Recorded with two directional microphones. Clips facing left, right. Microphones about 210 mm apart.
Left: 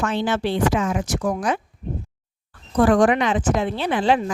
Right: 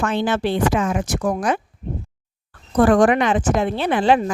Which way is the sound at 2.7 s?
50° right (ahead or behind).